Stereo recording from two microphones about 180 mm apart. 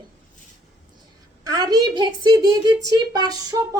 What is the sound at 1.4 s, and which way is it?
A woman's voice, 20° right (ahead or behind).